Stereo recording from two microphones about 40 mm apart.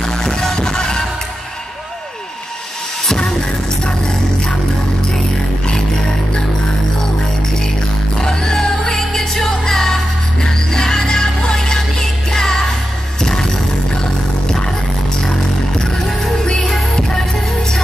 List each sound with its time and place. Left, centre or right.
0.0 s music: centre
3.1 s music: centre
8.2 s music: centre
16.1 s music: centre